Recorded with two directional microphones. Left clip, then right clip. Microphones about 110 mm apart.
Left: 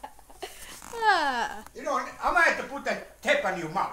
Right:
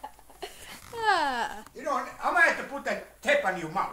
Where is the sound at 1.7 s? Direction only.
15° left (ahead or behind).